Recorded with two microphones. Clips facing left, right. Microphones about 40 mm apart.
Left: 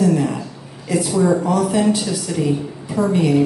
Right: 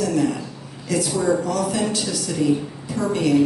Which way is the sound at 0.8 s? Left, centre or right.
Centre.